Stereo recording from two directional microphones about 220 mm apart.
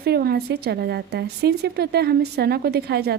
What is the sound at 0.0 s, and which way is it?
Speech, 45° right (ahead or behind).